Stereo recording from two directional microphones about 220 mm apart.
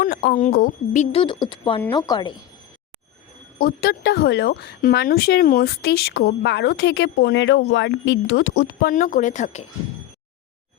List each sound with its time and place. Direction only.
0.0 s a sound: 45° left (ahead or behind)
0.3 s speech: 40° left (ahead or behind)
1.1 s speech: 20° left (ahead or behind)
3.6 s speech: 45° left (ahead or behind)